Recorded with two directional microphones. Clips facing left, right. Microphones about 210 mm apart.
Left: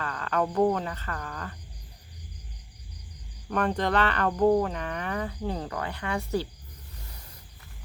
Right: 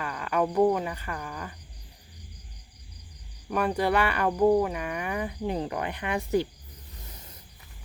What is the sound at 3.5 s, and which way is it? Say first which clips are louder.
Speech: right 1 dB; 10° right (ahead or behind).